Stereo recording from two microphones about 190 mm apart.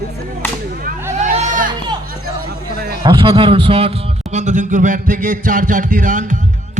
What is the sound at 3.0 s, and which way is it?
A man's voice, 25° right (ahead or behind).